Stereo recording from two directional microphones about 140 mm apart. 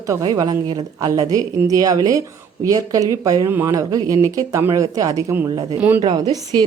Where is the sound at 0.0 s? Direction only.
25° right (ahead or behind).